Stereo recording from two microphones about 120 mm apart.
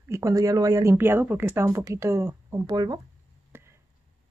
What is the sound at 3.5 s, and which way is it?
Chop, 20° right (ahead or behind).